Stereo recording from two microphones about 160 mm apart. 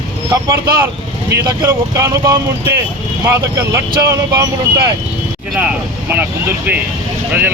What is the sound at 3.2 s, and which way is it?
Speech, 15° right (ahead or behind).